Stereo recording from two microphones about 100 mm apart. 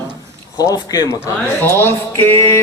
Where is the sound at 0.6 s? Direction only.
40° left (ahead or behind).